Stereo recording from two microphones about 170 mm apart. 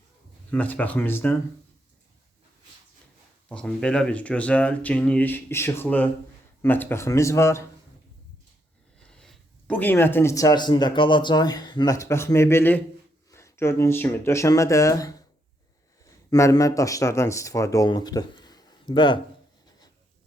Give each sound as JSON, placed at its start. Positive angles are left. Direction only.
{"t": 0.5, "sound": "speech", "side_deg": 10}
{"t": 3.5, "sound": "speech", "side_deg": 5}
{"t": 9.0, "sound": "speech", "side_deg": 5}